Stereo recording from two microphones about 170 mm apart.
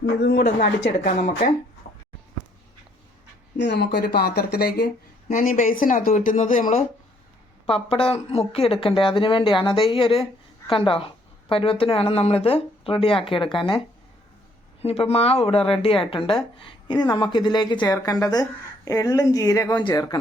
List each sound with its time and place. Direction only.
0.2 s speech: 70° left (ahead or behind)
0.9 s speech: 50° left (ahead or behind)
3.6 s speech: 85° left; by 4.9 s 65° left (ahead or behind)
5.3 s speech: 50° left (ahead or behind)
7.7 s speech: 35° left (ahead or behind)
14.8 s speech: 35° left (ahead or behind)